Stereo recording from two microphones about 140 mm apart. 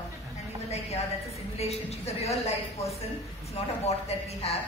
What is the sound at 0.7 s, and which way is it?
A woman's voice, 50° left (ahead or behind).